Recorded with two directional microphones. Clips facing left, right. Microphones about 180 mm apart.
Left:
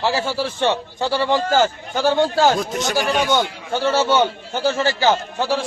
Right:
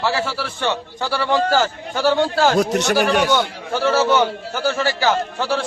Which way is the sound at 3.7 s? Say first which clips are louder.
Right 1 dB; 25° left (ahead or behind).